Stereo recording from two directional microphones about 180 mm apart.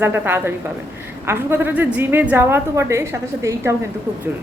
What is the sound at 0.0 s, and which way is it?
A woman's voice, 10° right (ahead or behind).